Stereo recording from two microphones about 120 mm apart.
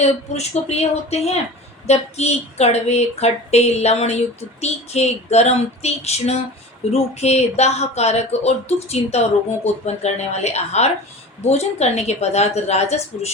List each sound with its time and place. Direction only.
0.0 s speech: 65° left (ahead or behind)